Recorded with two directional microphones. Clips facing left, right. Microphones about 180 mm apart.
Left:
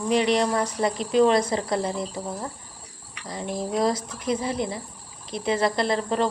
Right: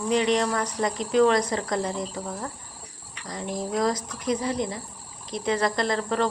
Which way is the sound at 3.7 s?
30° left (ahead or behind).